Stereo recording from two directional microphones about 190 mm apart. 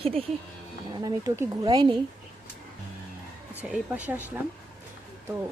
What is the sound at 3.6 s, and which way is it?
Speech, 5° right (ahead or behind).